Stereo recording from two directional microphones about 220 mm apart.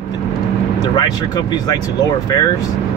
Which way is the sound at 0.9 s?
20° left (ahead or behind).